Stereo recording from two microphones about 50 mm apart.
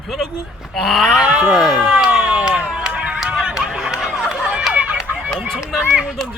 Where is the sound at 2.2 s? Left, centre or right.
Centre.